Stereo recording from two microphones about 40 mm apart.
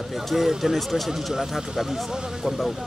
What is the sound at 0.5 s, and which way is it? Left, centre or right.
Speech, centre.